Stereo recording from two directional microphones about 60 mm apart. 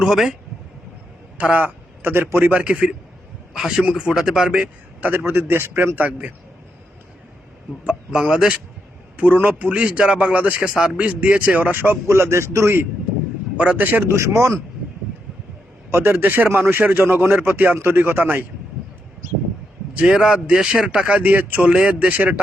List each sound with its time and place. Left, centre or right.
0.0 s a man's voice: centre
1.4 s a man's voice: right
2.5 s a man's voice: right
5.0 s a man's voice: right
6.0 s a man's voice: right
7.9 s a man's voice: centre
9.1 s a man's voice: right
12.0 s a man's voice: right
13.6 s a man's voice: right
14.1 s speech: right
15.9 s a man's voice: right
20.0 s a man's voice: centre